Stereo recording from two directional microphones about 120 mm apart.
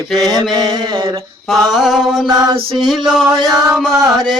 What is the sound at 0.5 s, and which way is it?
Mantra, 35° right (ahead or behind).